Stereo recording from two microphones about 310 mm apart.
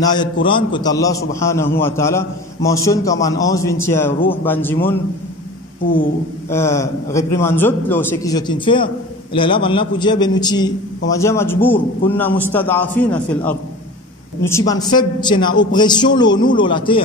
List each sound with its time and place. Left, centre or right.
0.0 s a man's voice: centre
6.5 s a man's voice: centre